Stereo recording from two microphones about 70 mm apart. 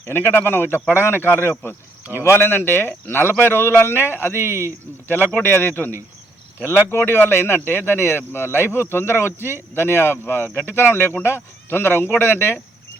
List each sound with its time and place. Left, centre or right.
0.0 s speech: left